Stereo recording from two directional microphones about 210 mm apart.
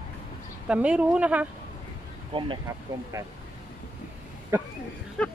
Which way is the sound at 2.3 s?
25° right (ahead or behind).